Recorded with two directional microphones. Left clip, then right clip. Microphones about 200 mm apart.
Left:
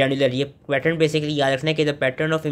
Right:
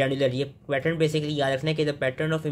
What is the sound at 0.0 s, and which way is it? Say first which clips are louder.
Speech: left 5 dB; 10° left (ahead or behind).